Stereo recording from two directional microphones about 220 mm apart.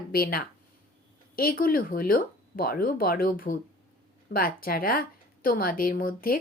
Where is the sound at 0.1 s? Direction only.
45° left (ahead or behind).